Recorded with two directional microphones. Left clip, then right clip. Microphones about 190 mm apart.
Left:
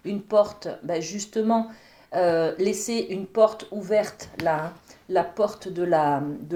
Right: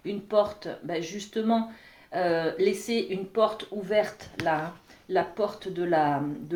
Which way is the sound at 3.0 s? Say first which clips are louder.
Left 8 dB; 35° left (ahead or behind).